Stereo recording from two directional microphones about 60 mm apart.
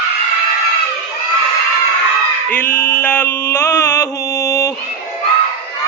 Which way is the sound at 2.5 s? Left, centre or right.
Left.